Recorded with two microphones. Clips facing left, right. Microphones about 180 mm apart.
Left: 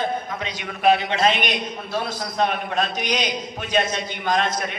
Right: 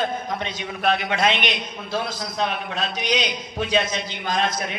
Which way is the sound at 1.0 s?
30° left (ahead or behind).